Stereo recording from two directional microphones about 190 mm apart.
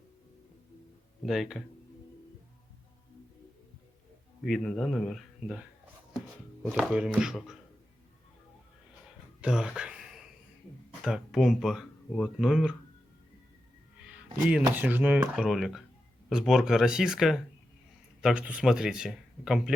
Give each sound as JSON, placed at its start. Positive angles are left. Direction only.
{"t": 1.2, "sound": "speech", "side_deg": 0}
{"t": 4.4, "sound": "speech", "side_deg": 0}
{"t": 6.1, "sound": "music", "side_deg": 5}
{"t": 6.7, "sound": "speech", "side_deg": -5}
{"t": 9.4, "sound": "a sound", "side_deg": -5}
{"t": 11.0, "sound": "speech", "side_deg": 0}
{"t": 14.1, "sound": "music", "side_deg": -5}
{"t": 14.8, "sound": "speech", "side_deg": -10}